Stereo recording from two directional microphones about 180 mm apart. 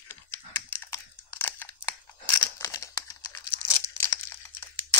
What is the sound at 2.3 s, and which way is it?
Crumpling, 20° left (ahead or behind).